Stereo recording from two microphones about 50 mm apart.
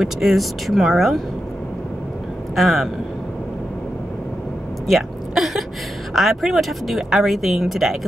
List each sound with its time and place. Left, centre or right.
0.2 s speech: centre
2.5 s speech: centre
4.8 s a sound: centre
6.1 s speech: centre